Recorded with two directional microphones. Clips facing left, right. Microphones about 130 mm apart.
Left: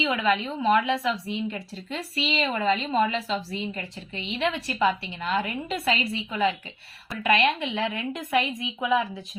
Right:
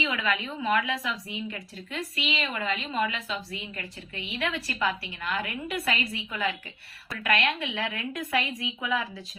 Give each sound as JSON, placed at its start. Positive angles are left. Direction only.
{"t": 0.0, "sound": "speech", "side_deg": 25}